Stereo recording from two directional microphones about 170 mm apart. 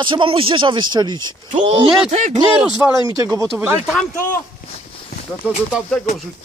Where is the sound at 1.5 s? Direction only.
40° right (ahead or behind).